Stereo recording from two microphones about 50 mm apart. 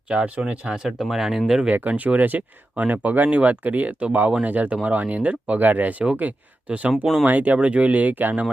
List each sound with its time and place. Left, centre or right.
0.1 s speech: right; by 1.6 s centre
1.7 s speech: right
6.9 s speech: centre
7.3 s speech: right